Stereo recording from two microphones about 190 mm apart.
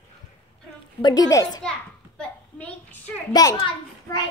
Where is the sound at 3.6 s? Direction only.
25° left (ahead or behind).